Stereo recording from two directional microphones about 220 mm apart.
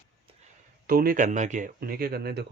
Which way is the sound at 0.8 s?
40° right (ahead or behind).